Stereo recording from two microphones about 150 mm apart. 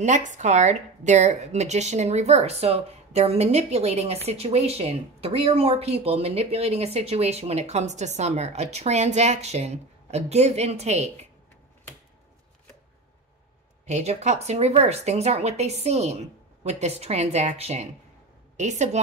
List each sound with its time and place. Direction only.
0.0 s speech: 55° right (ahead or behind)
13.8 s speech: 50° right (ahead or behind)